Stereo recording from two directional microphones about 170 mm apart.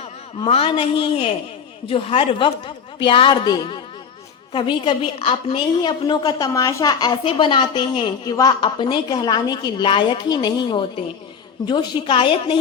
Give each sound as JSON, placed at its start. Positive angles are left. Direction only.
{"t": 0.0, "sound": "a woman's voice", "side_deg": 35}